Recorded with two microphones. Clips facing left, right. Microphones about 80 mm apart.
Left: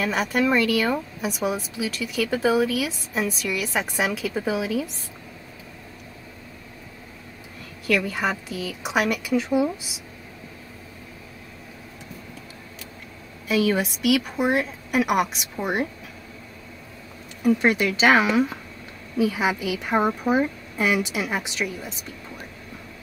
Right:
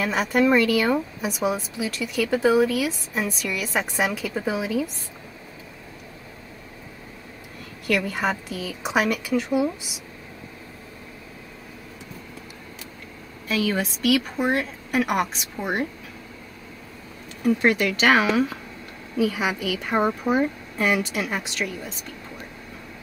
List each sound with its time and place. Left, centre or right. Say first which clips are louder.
0.0 s speech: right 2 dB; centre
7.8 s speech: even; centre
13.5 s a woman's voice: left 3 dB; centre
17.4 s a woman's voice: even; centre
19.1 s a woman's voice: left 1 dB; centre